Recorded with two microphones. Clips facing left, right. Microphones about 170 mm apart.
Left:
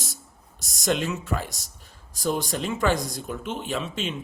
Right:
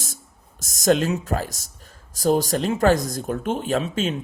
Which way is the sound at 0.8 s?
40° right (ahead or behind).